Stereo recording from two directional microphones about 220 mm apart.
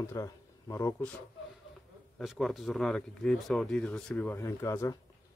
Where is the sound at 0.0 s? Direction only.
15° left (ahead or behind).